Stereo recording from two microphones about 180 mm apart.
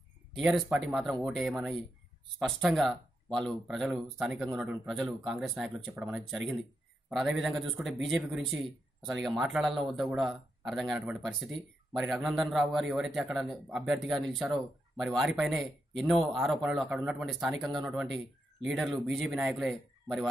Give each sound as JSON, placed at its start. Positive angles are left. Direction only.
{"t": 0.4, "sound": "speech", "side_deg": 0}